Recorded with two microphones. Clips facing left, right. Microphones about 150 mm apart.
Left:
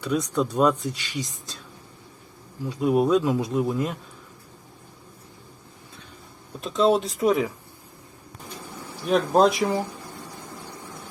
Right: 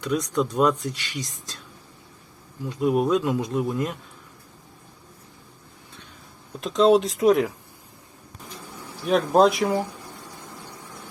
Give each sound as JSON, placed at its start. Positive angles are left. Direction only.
{"t": 0.0, "sound": "speech", "side_deg": 10}
{"t": 2.8, "sound": "speech", "side_deg": -5}
{"t": 6.6, "sound": "speech", "side_deg": 0}
{"t": 9.0, "sound": "speech", "side_deg": 0}